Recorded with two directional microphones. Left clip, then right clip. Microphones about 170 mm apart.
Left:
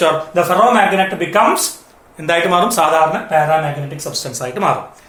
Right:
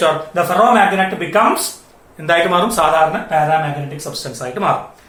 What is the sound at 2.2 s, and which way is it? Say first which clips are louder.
Speech: even; 15° left (ahead or behind).